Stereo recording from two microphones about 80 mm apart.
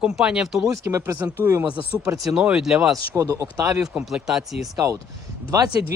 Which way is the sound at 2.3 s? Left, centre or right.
Centre.